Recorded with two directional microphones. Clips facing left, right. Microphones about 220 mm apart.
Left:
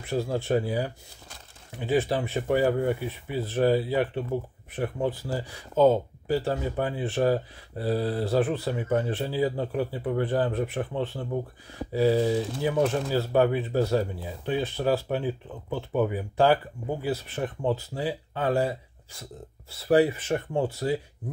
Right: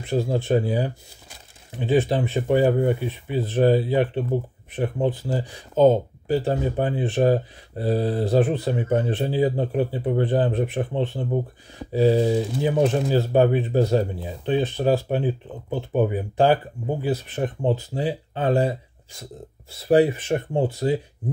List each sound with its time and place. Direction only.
0.0 s speech: 20° right (ahead or behind)